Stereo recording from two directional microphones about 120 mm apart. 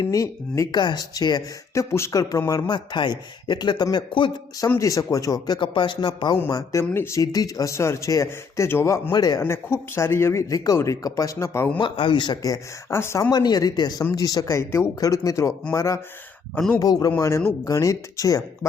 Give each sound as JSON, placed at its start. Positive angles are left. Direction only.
{"t": 0.0, "sound": "speech", "side_deg": 30}
{"t": 1.7, "sound": "speech", "side_deg": 25}
{"t": 4.8, "sound": "speech", "side_deg": 25}
{"t": 6.5, "sound": "speech", "side_deg": 25}
{"t": 9.1, "sound": "speech", "side_deg": 35}
{"t": 9.4, "sound": "speech", "side_deg": 20}
{"t": 11.8, "sound": "speech", "side_deg": 45}
{"t": 13.3, "sound": "speech", "side_deg": 35}